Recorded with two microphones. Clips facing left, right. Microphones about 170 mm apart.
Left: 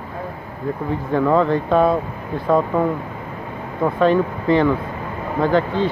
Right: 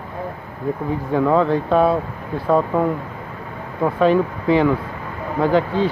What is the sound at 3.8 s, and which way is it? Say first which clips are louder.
Speech: even; 5° right (ahead or behind).